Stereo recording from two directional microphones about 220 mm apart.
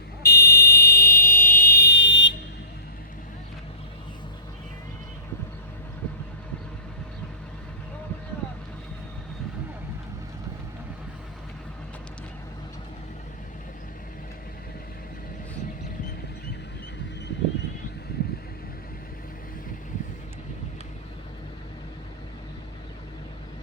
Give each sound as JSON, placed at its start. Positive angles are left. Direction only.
{"t": 0.2, "sound": "fire alarm", "side_deg": 45}